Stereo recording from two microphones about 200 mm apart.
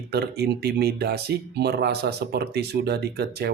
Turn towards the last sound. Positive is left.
turn(degrees=-55)  # may be behind; listen again after turning